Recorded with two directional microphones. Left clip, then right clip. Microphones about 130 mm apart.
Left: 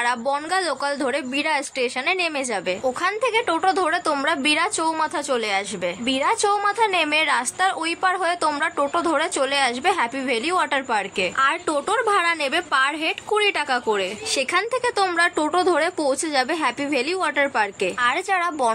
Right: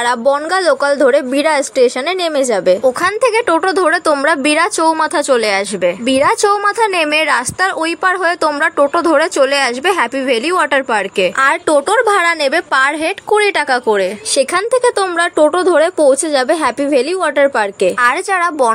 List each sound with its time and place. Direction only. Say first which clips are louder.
0.0 s a woman's voice: right 9 dB; 35° right (ahead or behind)
11.3 s a woman's voice: right 9 dB; 55° right (ahead or behind)